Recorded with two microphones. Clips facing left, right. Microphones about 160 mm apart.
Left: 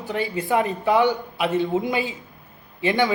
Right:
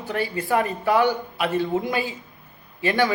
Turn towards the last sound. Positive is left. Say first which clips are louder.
# left 1 dB
turn(degrees=20)  # may be behind; listen again after turning